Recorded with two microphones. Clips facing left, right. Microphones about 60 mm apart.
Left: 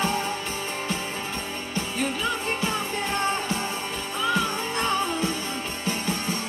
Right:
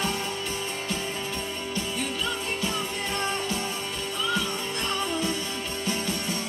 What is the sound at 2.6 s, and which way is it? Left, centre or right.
Music, left.